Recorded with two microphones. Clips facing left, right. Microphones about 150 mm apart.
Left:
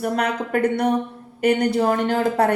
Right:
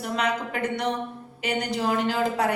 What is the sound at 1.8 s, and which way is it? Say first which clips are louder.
Speech: left 5 dB; 50° left (ahead or behind).